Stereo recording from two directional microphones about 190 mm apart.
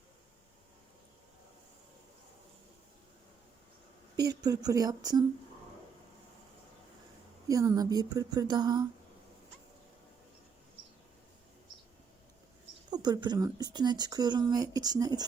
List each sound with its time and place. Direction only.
4.2 s speech: 20° right (ahead or behind)
7.4 s speech: 20° right (ahead or behind)
12.9 s speech: 20° right (ahead or behind)